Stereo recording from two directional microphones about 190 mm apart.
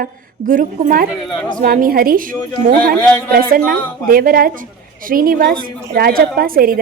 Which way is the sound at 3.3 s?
50° right (ahead or behind).